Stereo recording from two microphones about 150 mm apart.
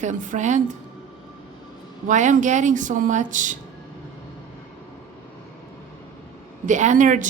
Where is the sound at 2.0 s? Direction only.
55° right (ahead or behind).